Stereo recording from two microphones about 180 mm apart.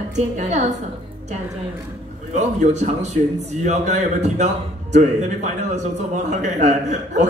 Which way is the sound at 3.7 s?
40° right (ahead or behind).